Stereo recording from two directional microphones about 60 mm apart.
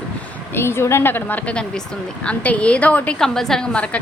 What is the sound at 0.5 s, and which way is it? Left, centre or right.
Speech, left.